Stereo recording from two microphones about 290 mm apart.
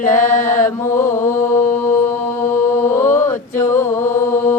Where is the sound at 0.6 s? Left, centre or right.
Centre.